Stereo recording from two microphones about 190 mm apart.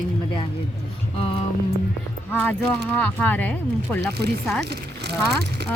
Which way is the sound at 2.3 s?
10° left (ahead or behind).